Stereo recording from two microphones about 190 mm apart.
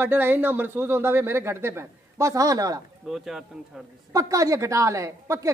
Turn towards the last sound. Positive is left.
turn(degrees=-15)  # may be behind; listen again after turning